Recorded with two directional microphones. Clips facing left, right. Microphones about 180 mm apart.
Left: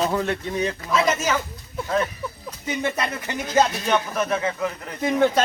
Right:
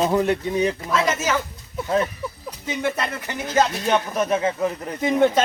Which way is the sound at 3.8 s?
15° right (ahead or behind).